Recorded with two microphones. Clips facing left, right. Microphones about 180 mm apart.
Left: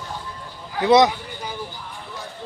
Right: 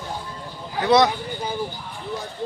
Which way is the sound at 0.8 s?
20° left (ahead or behind).